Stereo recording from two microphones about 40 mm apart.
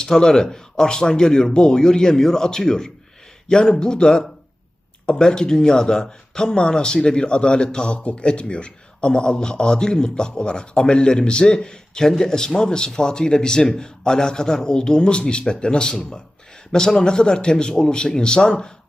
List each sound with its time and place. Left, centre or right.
0.0 s a man's voice: centre